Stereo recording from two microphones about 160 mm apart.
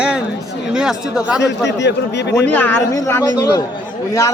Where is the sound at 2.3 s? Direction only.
10° left (ahead or behind).